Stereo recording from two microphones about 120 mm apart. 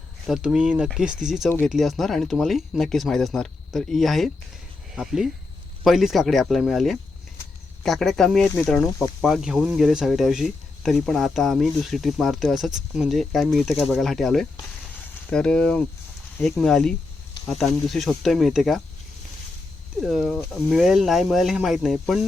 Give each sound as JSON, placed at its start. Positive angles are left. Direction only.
{"t": 0.3, "sound": "speech", "side_deg": -5}
{"t": 20.0, "sound": "speech", "side_deg": -5}